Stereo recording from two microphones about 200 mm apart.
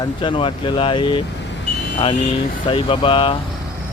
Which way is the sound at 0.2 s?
25° left (ahead or behind).